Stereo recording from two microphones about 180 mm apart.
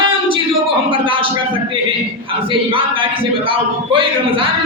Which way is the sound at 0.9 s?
30° right (ahead or behind).